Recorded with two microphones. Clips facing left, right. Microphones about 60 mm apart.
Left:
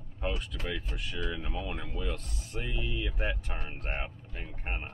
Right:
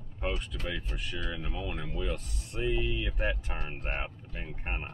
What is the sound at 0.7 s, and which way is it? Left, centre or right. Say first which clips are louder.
Speech: even; centre.